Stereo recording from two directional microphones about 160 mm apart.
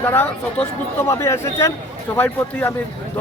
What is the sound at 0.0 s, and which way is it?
Speech, 15° left (ahead or behind).